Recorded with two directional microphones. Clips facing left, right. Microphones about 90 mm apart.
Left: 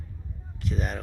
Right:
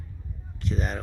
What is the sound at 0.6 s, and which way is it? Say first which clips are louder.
Speech: right 1 dB; 5° left (ahead or behind).